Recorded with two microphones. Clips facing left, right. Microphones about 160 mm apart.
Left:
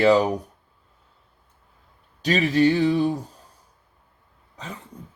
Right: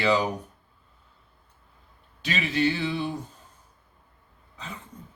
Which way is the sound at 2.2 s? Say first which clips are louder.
Left 7 dB; 40° left (ahead or behind).